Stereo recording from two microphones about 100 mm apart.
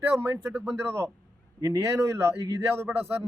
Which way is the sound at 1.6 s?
30° right (ahead or behind).